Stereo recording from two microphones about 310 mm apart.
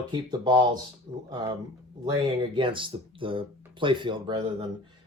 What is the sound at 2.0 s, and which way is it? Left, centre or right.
Speech, centre.